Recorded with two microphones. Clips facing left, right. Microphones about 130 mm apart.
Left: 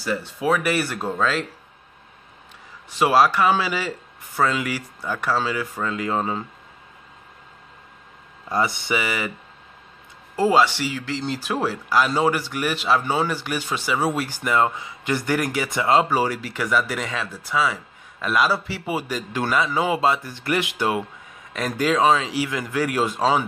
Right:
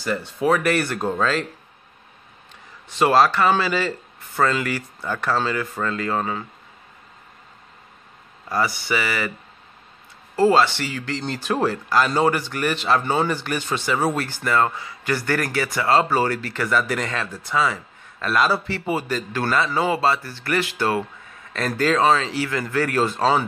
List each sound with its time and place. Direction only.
0.0 s speech: 5° left (ahead or behind)
2.9 s speech: 10° left (ahead or behind)
8.5 s speech: 25° left (ahead or behind)
10.3 s speech: 10° left (ahead or behind)